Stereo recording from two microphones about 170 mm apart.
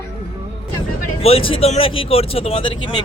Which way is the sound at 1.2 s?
35° left (ahead or behind).